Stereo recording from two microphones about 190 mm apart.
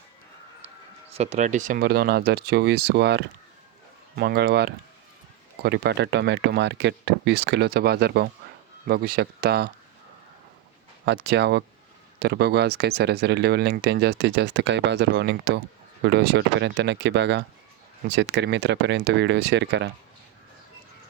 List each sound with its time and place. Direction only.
1.1 s speech: 35° right (ahead or behind); by 9.6 s 60° right (ahead or behind)
11.0 s speech: 60° right (ahead or behind)